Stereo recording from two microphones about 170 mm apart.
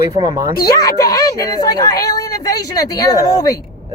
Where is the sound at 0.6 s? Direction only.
20° left (ahead or behind).